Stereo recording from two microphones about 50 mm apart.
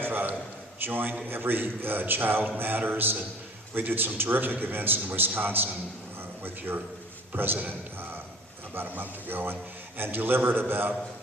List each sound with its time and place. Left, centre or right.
0.0 s a sound: right
0.8 s a man's voice: right
7.3 s a man's voice: right
8.7 s a man's voice: right